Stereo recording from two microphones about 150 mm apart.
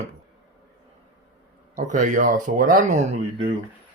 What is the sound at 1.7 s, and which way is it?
Speech, 50° right (ahead or behind).